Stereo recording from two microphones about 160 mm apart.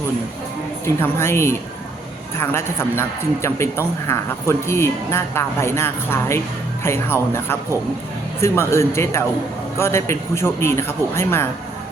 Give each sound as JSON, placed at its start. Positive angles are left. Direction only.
{"t": 1.0, "sound": "a man's voice", "side_deg": 15}